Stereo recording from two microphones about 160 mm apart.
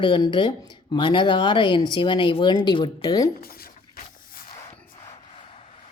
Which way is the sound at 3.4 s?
70° left (ahead or behind).